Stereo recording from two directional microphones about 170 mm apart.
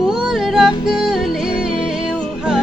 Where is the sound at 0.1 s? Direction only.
Centre (ahead or behind).